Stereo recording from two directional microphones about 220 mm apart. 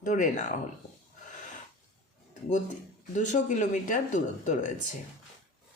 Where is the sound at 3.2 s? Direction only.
35° left (ahead or behind).